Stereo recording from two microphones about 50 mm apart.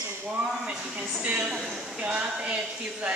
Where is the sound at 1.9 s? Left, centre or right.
Right.